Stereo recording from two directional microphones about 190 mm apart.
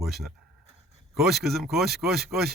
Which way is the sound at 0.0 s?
Centre (ahead or behind).